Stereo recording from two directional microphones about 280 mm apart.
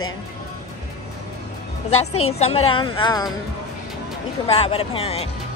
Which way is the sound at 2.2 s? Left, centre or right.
Left.